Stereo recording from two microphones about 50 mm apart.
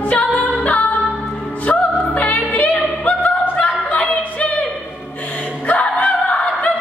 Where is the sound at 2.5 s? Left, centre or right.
Left.